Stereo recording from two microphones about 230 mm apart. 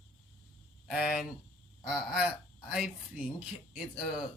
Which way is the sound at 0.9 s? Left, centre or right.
Centre.